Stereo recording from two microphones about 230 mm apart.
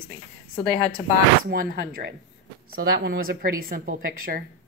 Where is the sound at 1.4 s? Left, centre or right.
Right.